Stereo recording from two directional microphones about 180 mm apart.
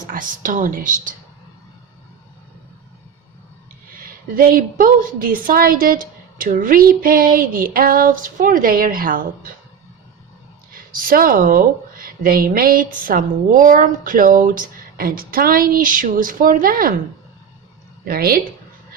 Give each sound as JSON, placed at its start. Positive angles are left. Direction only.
{"t": 0.0, "sound": "a woman's voice", "side_deg": -50}
{"t": 3.9, "sound": "a woman's voice", "side_deg": -50}
{"t": 10.7, "sound": "a woman's voice", "side_deg": -50}
{"t": 18.1, "sound": "speech", "side_deg": -55}